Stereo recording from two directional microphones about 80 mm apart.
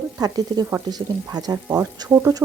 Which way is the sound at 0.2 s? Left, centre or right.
Right.